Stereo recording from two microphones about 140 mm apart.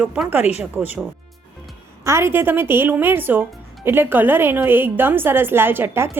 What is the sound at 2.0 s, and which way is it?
Speech, 20° right (ahead or behind).